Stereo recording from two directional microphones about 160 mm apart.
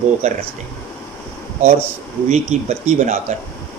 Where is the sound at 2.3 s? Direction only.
45° right (ahead or behind).